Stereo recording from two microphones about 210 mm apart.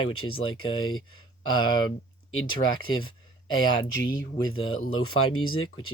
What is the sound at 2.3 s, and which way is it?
Speech, 70° left (ahead or behind).